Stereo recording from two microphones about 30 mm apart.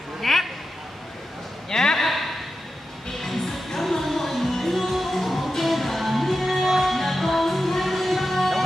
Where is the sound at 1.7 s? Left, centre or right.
Centre.